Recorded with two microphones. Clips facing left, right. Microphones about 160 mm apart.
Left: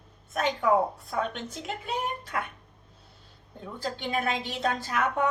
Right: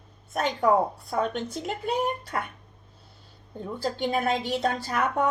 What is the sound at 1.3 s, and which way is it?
Speech, 40° right (ahead or behind).